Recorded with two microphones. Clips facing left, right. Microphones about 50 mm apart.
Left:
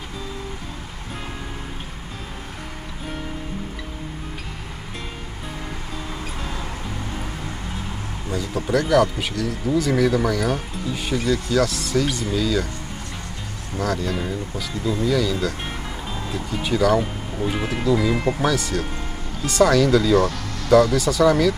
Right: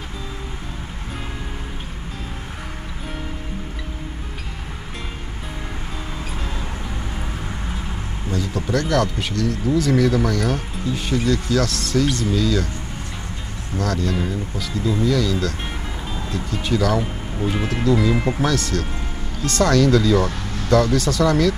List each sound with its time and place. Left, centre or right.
8.3 s speech: centre
13.7 s speech: centre
20.2 s vehicle: right
20.7 s speech: centre